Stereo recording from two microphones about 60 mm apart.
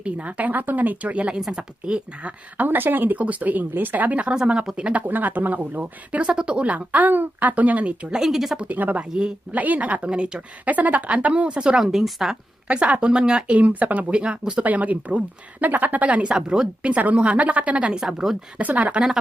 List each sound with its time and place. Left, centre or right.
0.0 s speech: right
5.0 s speech: right
8.1 s speech: centre
8.5 s speech: right
10.7 s speech: right; by 12.4 s centre
12.6 s speech: right
16.9 s speech: right
17.9 s speech: centre
18.6 s speech: right